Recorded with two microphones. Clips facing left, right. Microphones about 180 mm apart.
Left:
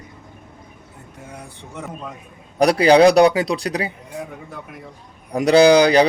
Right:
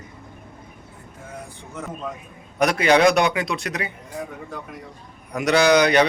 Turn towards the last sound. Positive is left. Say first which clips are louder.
# left 5 dB
turn(degrees=30)  # may be behind; listen again after turning